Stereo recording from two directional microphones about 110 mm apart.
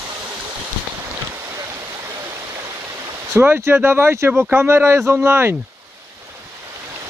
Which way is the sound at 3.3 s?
15° right (ahead or behind).